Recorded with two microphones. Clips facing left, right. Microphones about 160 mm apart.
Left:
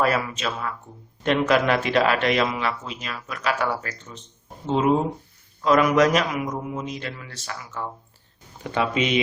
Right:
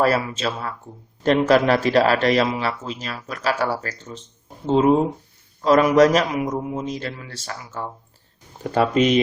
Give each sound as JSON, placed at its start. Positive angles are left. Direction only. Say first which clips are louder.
{"t": 0.0, "sound": "speech", "louder": "right 3 dB", "side_deg": -35}
{"t": 8.6, "sound": "speech", "louder": "right 6 dB", "side_deg": -40}